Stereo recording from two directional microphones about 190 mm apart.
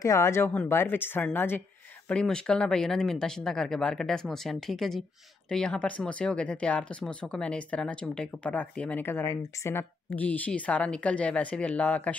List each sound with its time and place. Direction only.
0.0 s speech: 15° left (ahead or behind)